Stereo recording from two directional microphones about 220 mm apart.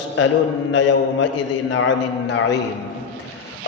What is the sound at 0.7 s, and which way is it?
A man's voice, 55° left (ahead or behind).